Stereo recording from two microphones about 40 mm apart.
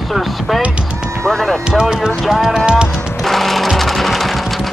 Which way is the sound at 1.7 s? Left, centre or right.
Centre.